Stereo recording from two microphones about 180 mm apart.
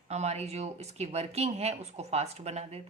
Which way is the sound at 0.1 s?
35° right (ahead or behind).